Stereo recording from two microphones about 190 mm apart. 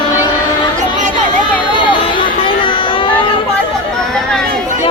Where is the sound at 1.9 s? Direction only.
25° left (ahead or behind).